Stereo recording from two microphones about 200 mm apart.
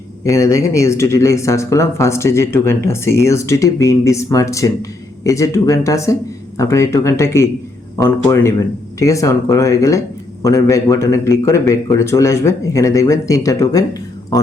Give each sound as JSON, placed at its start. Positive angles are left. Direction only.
{"t": 0.3, "sound": "speech", "side_deg": 15}